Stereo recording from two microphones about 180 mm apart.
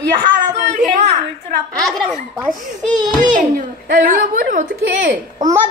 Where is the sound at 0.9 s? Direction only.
40° right (ahead or behind).